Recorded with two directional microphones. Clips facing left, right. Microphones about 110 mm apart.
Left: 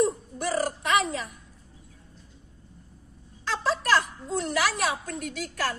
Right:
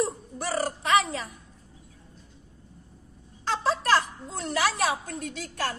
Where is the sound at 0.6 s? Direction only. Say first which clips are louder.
Right 2 dB; 30° right (ahead or behind).